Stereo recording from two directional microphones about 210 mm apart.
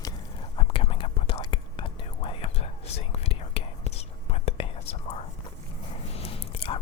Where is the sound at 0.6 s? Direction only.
25° left (ahead or behind).